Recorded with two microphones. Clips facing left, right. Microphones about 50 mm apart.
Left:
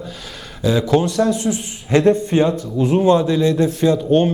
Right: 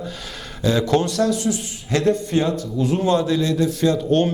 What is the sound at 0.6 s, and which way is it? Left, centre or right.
Speech, centre.